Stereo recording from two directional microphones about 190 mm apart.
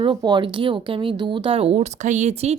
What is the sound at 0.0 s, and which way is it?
A woman's voice, 25° right (ahead or behind).